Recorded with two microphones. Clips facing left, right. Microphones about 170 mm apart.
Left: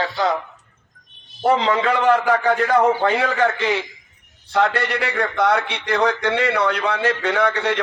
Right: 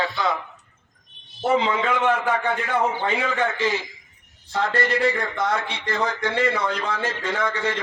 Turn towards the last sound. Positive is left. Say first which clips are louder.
# left 5 dB
turn(degrees=65)  # may be behind; listen again after turning